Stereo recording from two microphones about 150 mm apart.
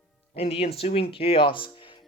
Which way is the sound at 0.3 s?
40° left (ahead or behind).